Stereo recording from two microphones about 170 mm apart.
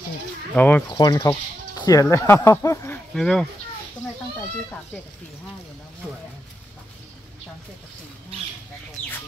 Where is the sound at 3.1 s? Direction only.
5° left (ahead or behind).